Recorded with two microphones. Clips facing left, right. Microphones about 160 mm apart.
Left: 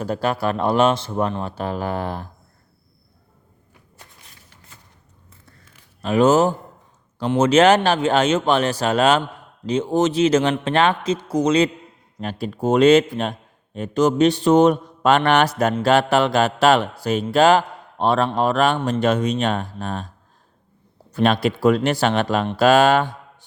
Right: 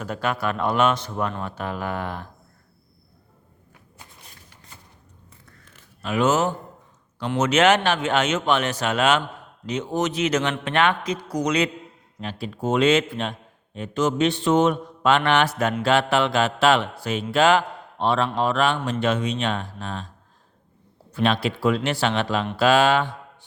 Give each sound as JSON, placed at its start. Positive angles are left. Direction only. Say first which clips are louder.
{"t": 0.0, "sound": "mantra", "louder": "left 4 dB", "side_deg": 35}
{"t": 6.0, "sound": "mantra", "louder": "left 6 dB", "side_deg": 35}
{"t": 9.6, "sound": "speech", "louder": "left 6 dB", "side_deg": 30}
{"t": 12.2, "sound": "mantra", "louder": "left 4 dB", "side_deg": 45}
{"t": 18.3, "sound": "speech", "louder": "left 3 dB", "side_deg": 45}
{"t": 18.9, "sound": "mantra", "louder": "left 4 dB", "side_deg": 40}
{"t": 21.1, "sound": "speech", "louder": "left 4 dB", "side_deg": 45}